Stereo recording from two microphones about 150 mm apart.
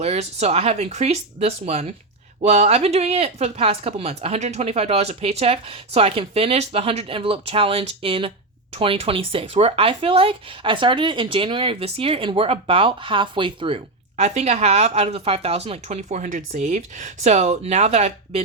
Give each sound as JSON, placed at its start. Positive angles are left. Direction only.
{"t": 0.0, "sound": "speech", "side_deg": -45}